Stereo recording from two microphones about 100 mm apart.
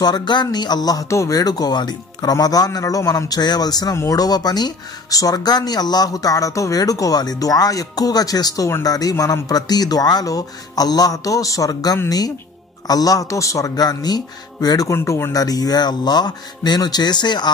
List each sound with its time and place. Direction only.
0.0 s speech: 45° left (ahead or behind); by 15.3 s 25° left (ahead or behind)
15.3 s a man's voice: 40° left (ahead or behind)